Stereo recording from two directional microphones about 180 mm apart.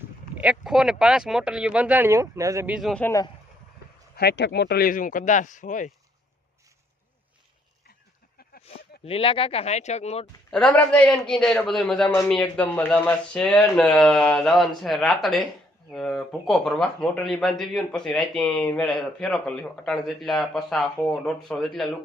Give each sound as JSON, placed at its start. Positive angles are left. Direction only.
{"t": 0.3, "sound": "speech", "side_deg": -5}
{"t": 2.7, "sound": "speech", "side_deg": 0}
{"t": 3.0, "sound": "speech", "side_deg": 15}
{"t": 4.1, "sound": "speech", "side_deg": 65}
{"t": 9.0, "sound": "speech", "side_deg": 30}
{"t": 10.5, "sound": "speech", "side_deg": 5}